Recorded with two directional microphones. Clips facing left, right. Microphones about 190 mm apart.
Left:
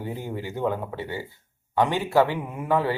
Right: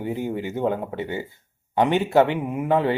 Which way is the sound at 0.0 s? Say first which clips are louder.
Right 5 dB; 15° right (ahead or behind).